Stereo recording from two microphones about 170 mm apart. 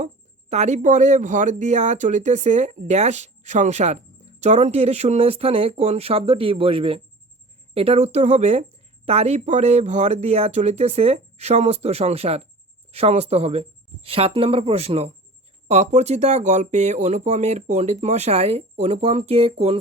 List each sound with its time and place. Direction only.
0.5 s speech: 40° right (ahead or behind)